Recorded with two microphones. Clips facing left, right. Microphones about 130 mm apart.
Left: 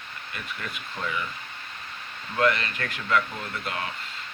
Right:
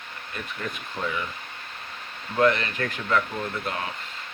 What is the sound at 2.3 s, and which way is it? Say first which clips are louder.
Speech: right 3 dB; 25° right (ahead or behind).